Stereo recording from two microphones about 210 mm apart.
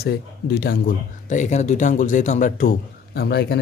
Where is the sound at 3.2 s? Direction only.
50° left (ahead or behind).